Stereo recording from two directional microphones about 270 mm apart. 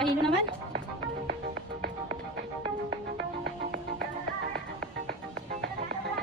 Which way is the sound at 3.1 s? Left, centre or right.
Right.